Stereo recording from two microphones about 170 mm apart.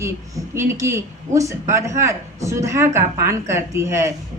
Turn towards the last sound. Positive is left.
turn(degrees=-15)  # may be behind; listen again after turning